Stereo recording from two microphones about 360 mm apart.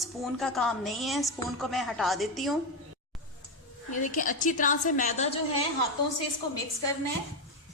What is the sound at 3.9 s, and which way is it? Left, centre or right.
A woman's voice, left.